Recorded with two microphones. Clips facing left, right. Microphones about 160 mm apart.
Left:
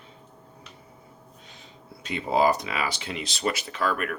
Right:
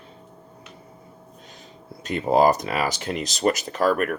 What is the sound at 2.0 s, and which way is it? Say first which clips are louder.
Speech: right 4 dB; 45° right (ahead or behind).